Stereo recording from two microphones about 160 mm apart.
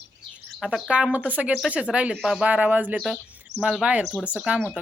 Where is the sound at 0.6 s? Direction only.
Centre (ahead or behind).